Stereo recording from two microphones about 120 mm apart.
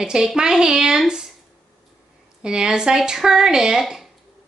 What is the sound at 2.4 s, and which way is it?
A woman's voice, 5° right (ahead or behind).